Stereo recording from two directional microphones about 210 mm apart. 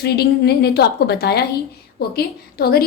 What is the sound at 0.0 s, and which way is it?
A woman's voice, 50° left (ahead or behind).